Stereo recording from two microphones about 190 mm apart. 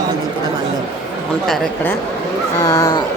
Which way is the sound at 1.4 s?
10° left (ahead or behind).